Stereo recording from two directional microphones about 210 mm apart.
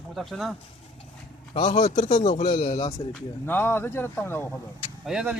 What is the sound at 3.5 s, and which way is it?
Speech, 10° left (ahead or behind).